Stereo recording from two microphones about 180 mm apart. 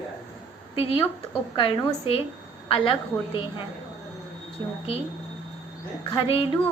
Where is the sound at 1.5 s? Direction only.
25° left (ahead or behind).